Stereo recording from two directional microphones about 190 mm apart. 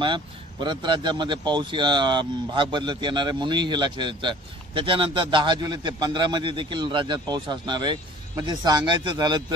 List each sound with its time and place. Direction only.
0.0 s speech: 25° right (ahead or behind)